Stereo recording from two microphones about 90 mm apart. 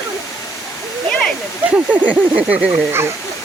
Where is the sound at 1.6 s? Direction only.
15° right (ahead or behind).